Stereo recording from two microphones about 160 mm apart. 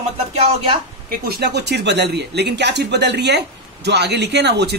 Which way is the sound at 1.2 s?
80° right.